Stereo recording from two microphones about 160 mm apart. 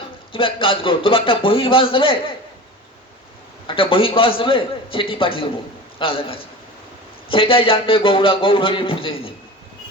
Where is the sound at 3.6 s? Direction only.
35° left (ahead or behind).